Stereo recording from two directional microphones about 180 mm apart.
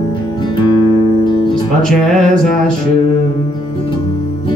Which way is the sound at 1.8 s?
5° left (ahead or behind).